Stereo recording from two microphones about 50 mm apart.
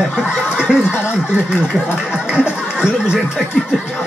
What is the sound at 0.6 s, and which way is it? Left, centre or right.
Snicker, centre.